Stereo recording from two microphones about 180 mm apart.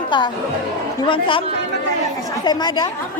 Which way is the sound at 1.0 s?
30° left (ahead or behind).